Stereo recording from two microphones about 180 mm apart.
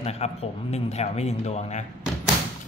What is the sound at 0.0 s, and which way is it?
Speech, 35° left (ahead or behind).